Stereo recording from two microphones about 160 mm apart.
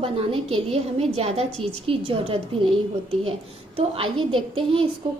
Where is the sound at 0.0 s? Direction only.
35° right (ahead or behind).